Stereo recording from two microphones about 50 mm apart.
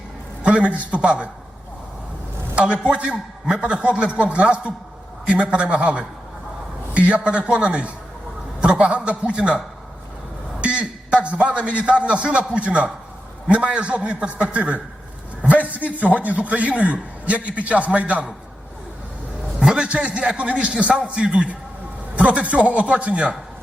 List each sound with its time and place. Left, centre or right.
0.4 s a man's voice: right
2.6 s a man's voice: right
10.6 s a man's voice: right
19.5 s a man's voice: centre